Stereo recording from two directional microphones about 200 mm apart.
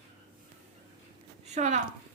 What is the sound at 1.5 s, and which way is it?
Speech, 35° right (ahead or behind).